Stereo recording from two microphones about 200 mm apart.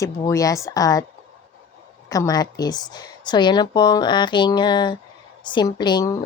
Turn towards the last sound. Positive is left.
turn(degrees=20)  # may be behind; listen again after turning